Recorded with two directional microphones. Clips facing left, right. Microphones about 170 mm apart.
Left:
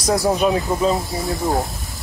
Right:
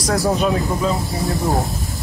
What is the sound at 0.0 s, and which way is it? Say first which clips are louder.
Speech: left 1 dB; 15° left (ahead or behind).